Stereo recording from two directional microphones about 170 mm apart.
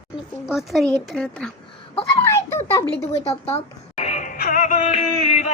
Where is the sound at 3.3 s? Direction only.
40° left (ahead or behind).